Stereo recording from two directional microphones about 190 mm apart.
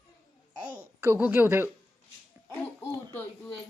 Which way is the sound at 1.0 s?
10° right (ahead or behind).